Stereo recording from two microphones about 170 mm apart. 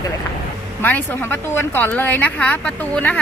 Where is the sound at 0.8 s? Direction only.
10° left (ahead or behind).